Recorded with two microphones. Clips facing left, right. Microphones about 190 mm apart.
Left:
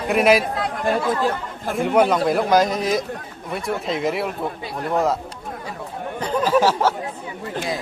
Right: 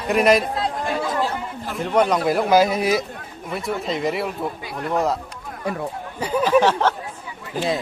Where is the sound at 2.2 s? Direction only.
5° right (ahead or behind).